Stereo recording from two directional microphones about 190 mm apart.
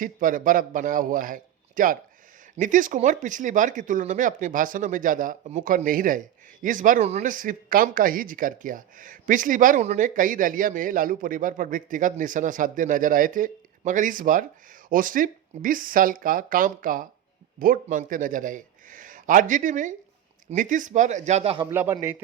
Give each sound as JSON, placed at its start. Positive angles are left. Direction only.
{"t": 0.0, "sound": "speech", "side_deg": -45}
{"t": 21.7, "sound": "speech", "side_deg": -10}